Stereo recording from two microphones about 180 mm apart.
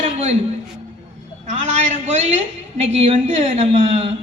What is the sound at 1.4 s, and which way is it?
A woman's voice, 40° right (ahead or behind).